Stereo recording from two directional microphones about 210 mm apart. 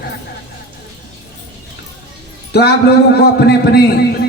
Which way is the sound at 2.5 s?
50° left (ahead or behind).